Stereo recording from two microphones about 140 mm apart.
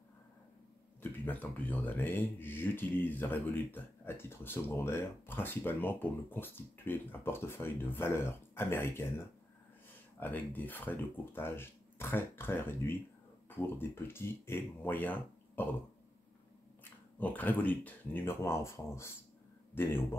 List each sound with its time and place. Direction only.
1.2 s speech: 10° left (ahead or behind)
10.2 s speech: 15° left (ahead or behind)
17.2 s speech: 10° left (ahead or behind)